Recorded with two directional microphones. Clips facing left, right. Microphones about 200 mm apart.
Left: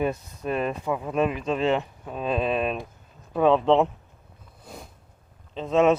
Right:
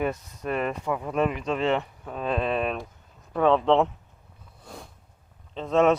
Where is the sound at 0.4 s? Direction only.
20° left (ahead or behind).